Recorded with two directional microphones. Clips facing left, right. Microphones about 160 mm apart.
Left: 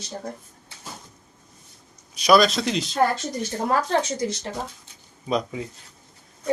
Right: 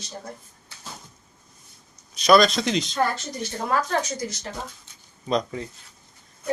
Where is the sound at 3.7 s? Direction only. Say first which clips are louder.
Left 2 dB; 30° left (ahead or behind).